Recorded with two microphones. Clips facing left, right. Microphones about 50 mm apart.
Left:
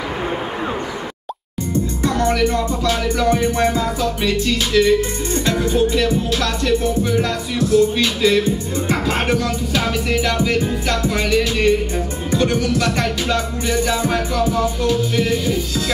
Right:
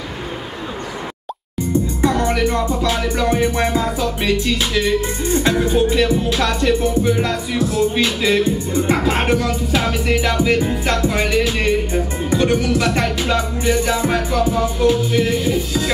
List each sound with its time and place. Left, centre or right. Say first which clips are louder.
2.0 s music: left 1 dB; centre